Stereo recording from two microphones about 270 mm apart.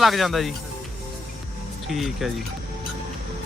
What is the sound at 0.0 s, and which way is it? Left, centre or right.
Speech, centre.